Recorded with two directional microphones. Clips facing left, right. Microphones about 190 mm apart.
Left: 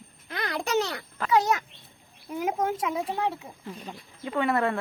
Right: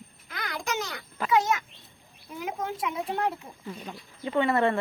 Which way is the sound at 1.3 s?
35° left (ahead or behind).